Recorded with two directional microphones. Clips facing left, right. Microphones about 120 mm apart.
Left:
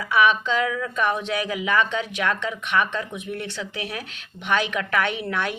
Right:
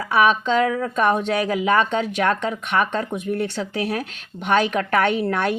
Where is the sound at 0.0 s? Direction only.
40° right (ahead or behind).